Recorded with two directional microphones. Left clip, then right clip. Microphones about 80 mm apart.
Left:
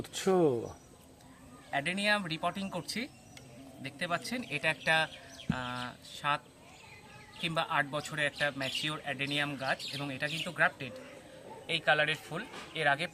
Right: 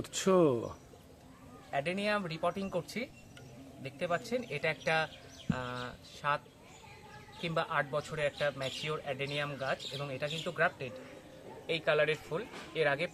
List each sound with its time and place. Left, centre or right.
0.0 s speech: centre
1.7 s speech: right
5.5 s a sound: right
5.7 s speech: right
7.4 s speech: centre
11.6 s a man's voice: right